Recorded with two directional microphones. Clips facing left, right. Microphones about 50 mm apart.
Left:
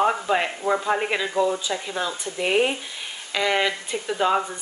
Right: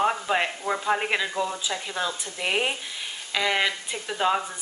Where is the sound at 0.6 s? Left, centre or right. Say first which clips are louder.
Left 5 dB; centre.